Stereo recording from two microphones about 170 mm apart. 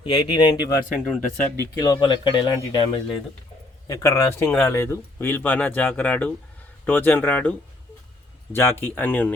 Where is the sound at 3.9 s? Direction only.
20° left (ahead or behind).